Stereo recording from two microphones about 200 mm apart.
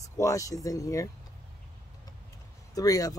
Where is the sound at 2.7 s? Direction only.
15° left (ahead or behind).